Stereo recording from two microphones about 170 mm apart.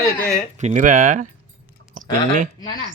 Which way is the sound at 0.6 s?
45° right (ahead or behind).